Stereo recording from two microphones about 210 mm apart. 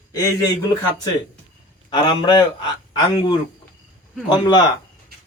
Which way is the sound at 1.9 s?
20° left (ahead or behind).